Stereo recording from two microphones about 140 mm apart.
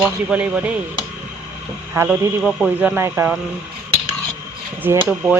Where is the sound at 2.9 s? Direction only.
15° right (ahead or behind).